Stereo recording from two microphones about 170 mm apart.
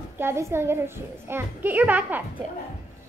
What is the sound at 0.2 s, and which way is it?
A child's voice, 15° right (ahead or behind).